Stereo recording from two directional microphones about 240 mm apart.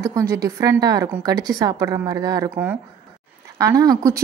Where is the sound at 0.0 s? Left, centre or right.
Centre.